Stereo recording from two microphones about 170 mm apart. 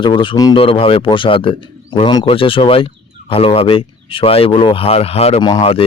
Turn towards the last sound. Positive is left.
turn(degrees=35)  # may be behind; listen again after turning